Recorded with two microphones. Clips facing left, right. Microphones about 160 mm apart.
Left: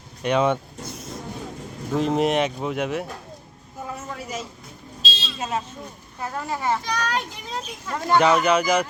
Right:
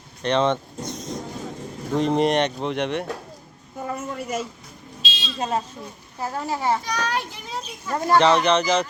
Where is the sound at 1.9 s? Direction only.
5° left (ahead or behind).